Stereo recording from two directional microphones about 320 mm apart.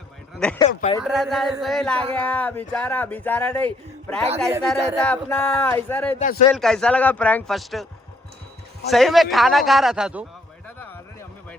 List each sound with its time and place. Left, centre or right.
0.3 s speech: centre
0.7 s speech: left
1.0 s speech: centre
6.1 s speech: left
6.4 s speech: centre
8.9 s speech: centre
10.8 s a sound: centre